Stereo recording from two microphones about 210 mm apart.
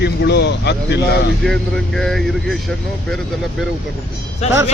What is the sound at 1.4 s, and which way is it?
Speech, 5° left (ahead or behind).